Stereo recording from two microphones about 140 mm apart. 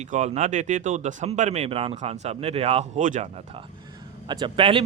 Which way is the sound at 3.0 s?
65° right (ahead or behind).